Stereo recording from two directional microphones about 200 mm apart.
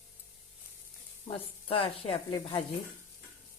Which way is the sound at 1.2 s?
30° left (ahead or behind).